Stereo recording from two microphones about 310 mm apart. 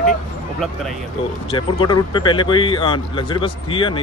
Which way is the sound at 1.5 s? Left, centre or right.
Centre.